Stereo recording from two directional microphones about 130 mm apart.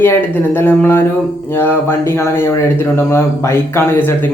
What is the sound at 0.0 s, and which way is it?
A man's voice, 15° left (ahead or behind).